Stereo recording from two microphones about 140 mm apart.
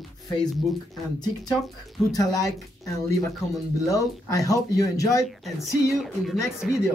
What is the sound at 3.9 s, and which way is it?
Speech, 25° left (ahead or behind).